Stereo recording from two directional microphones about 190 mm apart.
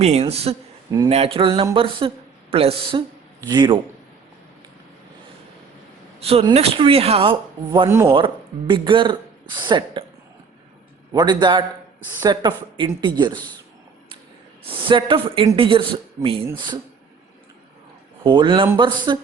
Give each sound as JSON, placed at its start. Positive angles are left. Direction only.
{"t": 0.0, "sound": "speech", "side_deg": -35}
{"t": 0.9, "sound": "speech", "side_deg": -20}
{"t": 1.1, "sound": "speech", "side_deg": -30}
{"t": 6.1, "sound": "speech", "side_deg": -30}
{"t": 7.9, "sound": "speech", "side_deg": -15}
{"t": 8.1, "sound": "speech", "side_deg": -25}
{"t": 11.1, "sound": "speech", "side_deg": -20}
{"t": 14.7, "sound": "speech", "side_deg": -25}
{"t": 18.2, "sound": "speech", "side_deg": -25}